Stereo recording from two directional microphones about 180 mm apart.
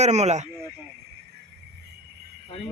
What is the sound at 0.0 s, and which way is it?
Speech, 40° right (ahead or behind).